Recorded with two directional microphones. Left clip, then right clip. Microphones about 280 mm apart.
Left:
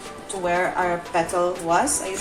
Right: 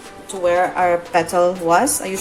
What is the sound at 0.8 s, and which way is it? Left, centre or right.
A woman's voice, right.